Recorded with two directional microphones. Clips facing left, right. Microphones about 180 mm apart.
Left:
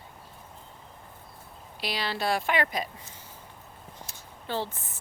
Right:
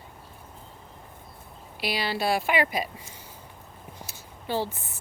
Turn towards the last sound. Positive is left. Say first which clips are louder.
# right 3 dB
turn(degrees=-10)  # may be behind; listen again after turning